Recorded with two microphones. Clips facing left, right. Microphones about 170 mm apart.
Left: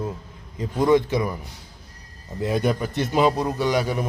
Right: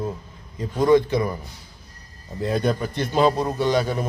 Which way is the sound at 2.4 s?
15° left (ahead or behind).